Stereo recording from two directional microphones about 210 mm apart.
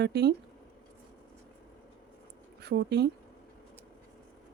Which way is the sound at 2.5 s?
50° right (ahead or behind).